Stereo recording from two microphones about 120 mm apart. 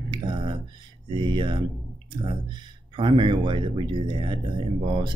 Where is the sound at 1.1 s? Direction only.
45° right (ahead or behind).